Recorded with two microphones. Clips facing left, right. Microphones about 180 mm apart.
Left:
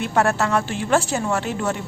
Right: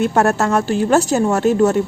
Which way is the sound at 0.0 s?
45° right (ahead or behind).